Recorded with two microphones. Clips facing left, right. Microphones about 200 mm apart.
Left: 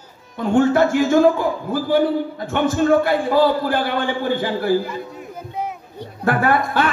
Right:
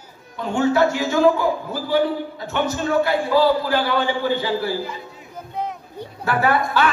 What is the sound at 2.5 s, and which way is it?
A man's voice, 50° left (ahead or behind).